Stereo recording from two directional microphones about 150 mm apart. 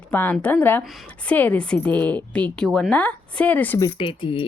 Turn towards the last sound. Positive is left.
turn(degrees=35)  # may be behind; listen again after turning